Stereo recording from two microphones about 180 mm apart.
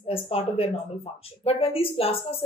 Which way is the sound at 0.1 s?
30° left (ahead or behind).